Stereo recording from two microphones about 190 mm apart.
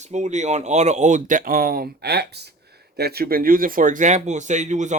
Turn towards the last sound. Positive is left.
turn(degrees=-40)  # may be behind; listen again after turning